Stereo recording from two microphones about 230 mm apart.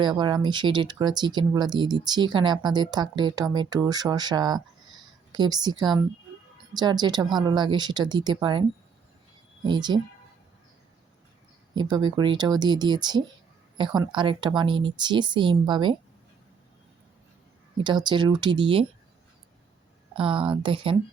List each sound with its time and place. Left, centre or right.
0.0 s speech: centre
9.6 s speech: centre
11.7 s speech: centre
17.7 s speech: centre
20.1 s speech: right